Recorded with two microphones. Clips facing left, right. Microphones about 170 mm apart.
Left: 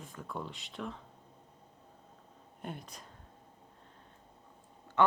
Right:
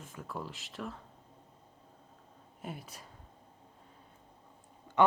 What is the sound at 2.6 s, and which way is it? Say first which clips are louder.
Speech: even; 5° right (ahead or behind).